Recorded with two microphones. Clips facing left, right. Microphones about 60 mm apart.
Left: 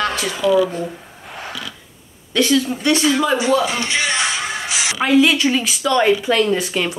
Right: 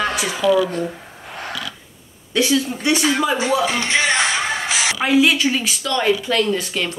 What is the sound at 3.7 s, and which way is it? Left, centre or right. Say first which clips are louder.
Speech: right 2 dB; right.